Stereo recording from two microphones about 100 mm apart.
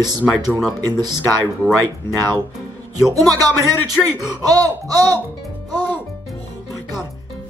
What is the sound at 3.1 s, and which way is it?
Speech, 40° right (ahead or behind).